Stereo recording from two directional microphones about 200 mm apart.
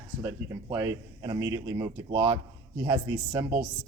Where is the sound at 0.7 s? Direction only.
15° right (ahead or behind).